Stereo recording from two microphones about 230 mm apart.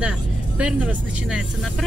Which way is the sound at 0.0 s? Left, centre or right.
Centre.